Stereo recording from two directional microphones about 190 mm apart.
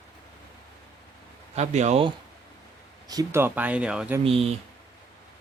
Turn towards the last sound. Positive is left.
turn(degrees=-30)  # may be behind; listen again after turning